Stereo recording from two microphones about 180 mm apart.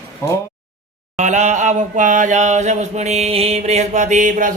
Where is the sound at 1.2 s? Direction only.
40° right (ahead or behind).